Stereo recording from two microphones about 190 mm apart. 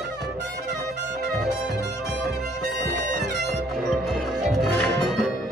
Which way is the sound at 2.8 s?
60° right (ahead or behind).